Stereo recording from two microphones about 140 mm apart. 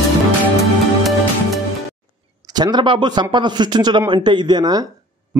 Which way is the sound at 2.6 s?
30° right (ahead or behind).